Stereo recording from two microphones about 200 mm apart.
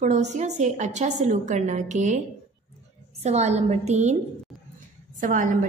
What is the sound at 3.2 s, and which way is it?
Speech, 35° right (ahead or behind).